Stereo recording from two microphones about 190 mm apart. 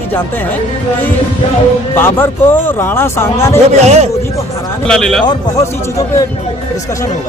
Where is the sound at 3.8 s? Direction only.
35° right (ahead or behind).